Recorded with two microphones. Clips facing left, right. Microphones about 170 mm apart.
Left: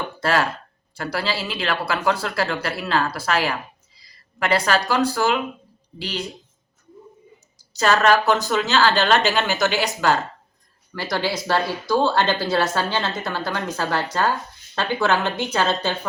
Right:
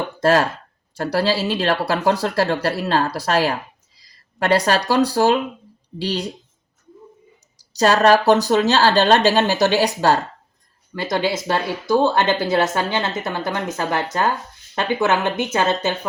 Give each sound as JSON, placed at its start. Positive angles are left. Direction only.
{"t": 0.2, "sound": "speech", "side_deg": -40}
{"t": 7.7, "sound": "speech", "side_deg": -35}
{"t": 10.9, "sound": "speech", "side_deg": -20}